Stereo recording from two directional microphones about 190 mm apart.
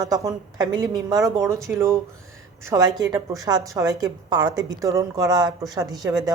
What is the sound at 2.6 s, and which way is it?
A woman's voice, 20° right (ahead or behind).